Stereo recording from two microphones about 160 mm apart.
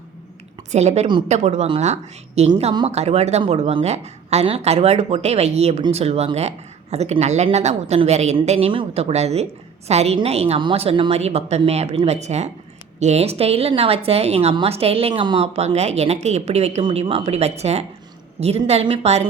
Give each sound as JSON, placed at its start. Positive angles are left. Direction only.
{"t": 0.7, "sound": "a woman's voice", "side_deg": -45}